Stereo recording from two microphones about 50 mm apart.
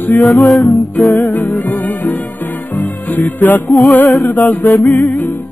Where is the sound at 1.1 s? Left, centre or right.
Left.